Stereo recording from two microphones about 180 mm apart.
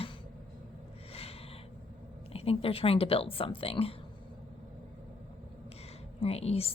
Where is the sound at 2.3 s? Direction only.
30° left (ahead or behind).